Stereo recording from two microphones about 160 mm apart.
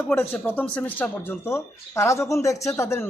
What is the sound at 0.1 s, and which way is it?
Speech, 10° left (ahead or behind).